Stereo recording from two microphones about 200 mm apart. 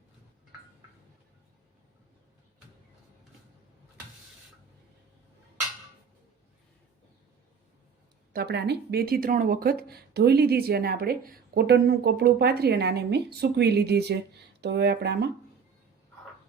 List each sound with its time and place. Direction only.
8.3 s speech: 50° right (ahead or behind)